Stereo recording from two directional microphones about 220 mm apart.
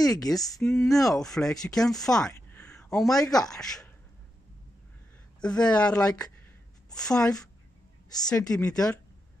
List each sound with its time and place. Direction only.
0.0 s speech: 15° left (ahead or behind)
1.2 s speech: centre (ahead or behind)
5.4 s speech: 5° left (ahead or behind)
8.3 s speech: 15° left (ahead or behind)